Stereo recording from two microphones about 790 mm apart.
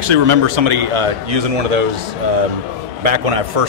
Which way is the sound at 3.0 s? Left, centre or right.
Right.